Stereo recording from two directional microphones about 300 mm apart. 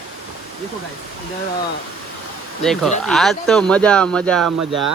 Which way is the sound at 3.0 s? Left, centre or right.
Centre.